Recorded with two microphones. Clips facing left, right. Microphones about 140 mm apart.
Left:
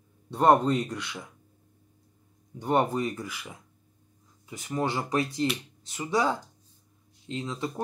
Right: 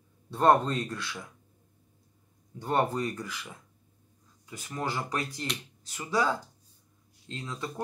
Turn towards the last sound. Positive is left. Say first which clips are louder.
# left 4 dB
turn(degrees=20)  # may be behind; listen again after turning